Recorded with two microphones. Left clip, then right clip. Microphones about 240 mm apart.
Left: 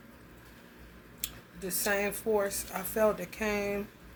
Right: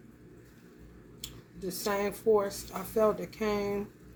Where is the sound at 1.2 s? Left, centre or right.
Centre.